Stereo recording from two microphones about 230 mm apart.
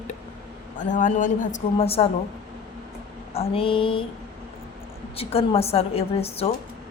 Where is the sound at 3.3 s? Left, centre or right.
Left.